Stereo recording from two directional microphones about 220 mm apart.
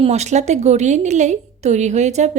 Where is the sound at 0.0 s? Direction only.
30° right (ahead or behind).